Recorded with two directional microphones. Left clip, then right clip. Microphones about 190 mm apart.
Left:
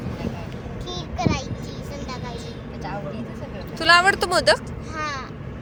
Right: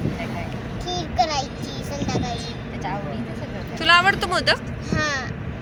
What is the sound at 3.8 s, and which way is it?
Speech, 30° left (ahead or behind).